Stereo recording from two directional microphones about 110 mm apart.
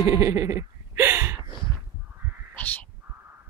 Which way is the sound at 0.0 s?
25° right (ahead or behind).